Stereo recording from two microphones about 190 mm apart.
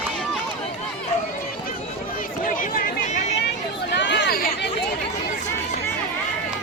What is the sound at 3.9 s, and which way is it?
Chatter, 65° left (ahead or behind).